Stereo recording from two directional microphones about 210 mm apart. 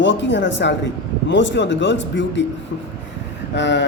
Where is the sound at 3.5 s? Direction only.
55° left (ahead or behind).